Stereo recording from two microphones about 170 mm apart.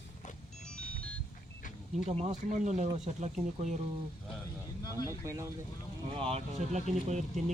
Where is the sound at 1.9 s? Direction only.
40° right (ahead or behind).